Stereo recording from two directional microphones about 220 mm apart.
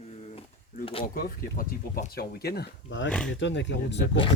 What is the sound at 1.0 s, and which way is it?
Speech, 40° left (ahead or behind).